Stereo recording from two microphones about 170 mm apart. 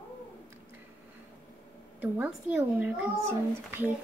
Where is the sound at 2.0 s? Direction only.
10° right (ahead or behind).